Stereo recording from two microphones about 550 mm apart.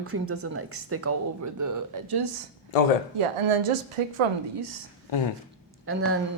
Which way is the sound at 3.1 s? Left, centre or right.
Right.